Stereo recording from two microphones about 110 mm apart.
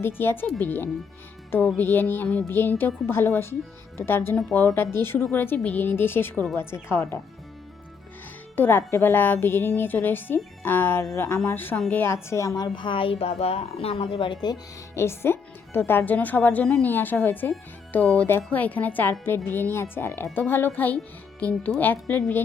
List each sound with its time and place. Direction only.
0.0 s a woman's voice: 20° left (ahead or behind)
8.5 s a woman's voice: 20° left (ahead or behind); by 14.6 s 45° left (ahead or behind)
14.9 s a woman's voice: 25° left (ahead or behind)